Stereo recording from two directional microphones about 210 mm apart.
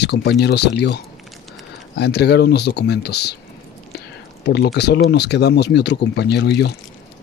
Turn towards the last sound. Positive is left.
turn(degrees=55)  # may be behind; listen again after turning